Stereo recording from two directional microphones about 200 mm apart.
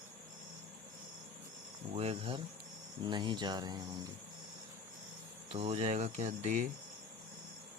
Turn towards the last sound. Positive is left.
turn(degrees=-35)  # may be behind; listen again after turning